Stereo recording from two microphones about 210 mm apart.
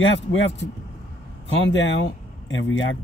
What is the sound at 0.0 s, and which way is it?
Speech, 65° left (ahead or behind).